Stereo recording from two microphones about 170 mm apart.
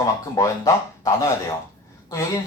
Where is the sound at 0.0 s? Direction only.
20° left (ahead or behind).